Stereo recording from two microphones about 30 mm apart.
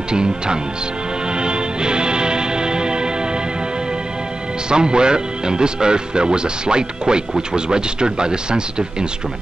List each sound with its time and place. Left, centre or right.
0.1 s speech: right
1.3 s music: right
4.6 s speech: right